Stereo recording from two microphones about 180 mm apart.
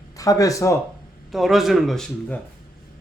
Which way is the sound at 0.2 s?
20° left (ahead or behind).